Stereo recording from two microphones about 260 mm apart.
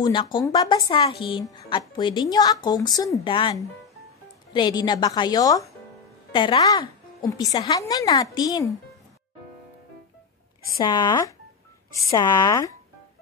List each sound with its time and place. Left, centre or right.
0.0 s a woman's voice: centre
10.8 s a woman's voice: centre